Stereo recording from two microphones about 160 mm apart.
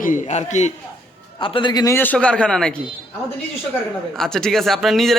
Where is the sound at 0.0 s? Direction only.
50° left (ahead or behind).